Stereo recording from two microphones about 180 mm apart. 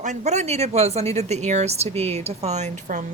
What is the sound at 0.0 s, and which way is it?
Speech, 40° right (ahead or behind).